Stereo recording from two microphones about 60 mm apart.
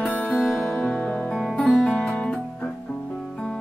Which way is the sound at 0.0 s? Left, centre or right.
Left.